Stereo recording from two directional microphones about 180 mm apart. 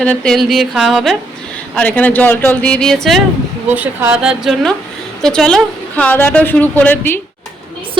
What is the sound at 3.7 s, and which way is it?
A woman's voice, 10° right (ahead or behind).